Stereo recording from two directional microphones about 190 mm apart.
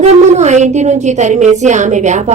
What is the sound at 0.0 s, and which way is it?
A woman's voice, 35° right (ahead or behind).